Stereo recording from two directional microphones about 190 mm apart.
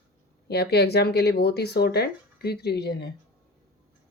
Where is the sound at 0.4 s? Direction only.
60° left (ahead or behind).